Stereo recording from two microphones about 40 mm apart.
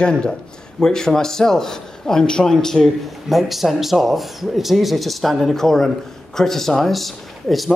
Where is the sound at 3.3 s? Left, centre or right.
Centre.